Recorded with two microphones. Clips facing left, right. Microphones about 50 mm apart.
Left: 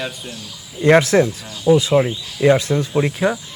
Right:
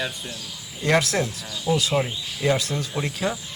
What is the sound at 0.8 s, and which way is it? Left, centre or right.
Speech, left.